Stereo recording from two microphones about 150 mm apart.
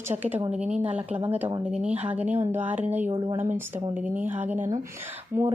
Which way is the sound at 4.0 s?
10° right (ahead or behind).